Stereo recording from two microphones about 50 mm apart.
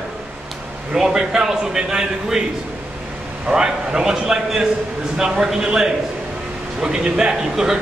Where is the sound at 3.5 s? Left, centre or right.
Centre.